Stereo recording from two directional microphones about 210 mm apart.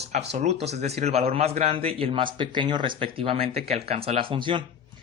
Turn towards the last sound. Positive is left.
turn(degrees=-25)  # may be behind; listen again after turning